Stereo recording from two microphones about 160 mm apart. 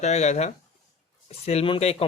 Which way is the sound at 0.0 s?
45° left (ahead or behind).